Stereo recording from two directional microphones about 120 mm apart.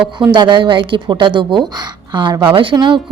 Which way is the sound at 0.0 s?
40° right (ahead or behind).